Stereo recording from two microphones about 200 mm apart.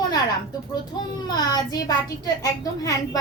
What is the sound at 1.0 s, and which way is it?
A woman's voice, 20° left (ahead or behind).